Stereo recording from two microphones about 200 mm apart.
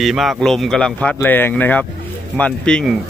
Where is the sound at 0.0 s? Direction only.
Centre (ahead or behind).